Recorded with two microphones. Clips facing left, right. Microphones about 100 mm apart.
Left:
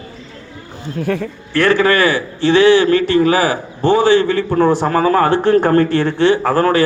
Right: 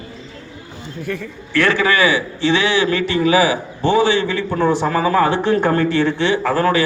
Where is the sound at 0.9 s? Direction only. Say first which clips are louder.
Left 7 dB; 55° left (ahead or behind).